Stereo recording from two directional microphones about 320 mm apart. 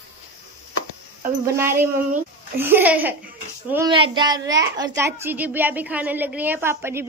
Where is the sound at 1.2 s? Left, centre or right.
Centre.